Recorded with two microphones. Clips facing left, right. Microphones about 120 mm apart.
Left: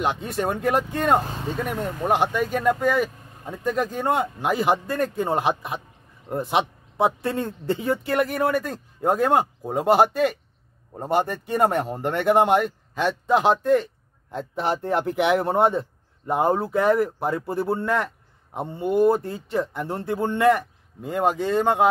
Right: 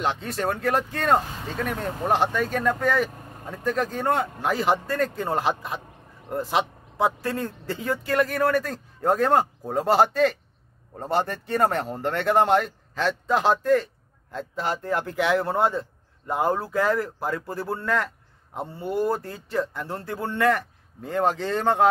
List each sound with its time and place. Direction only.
0.0 s speech: 15° left (ahead or behind)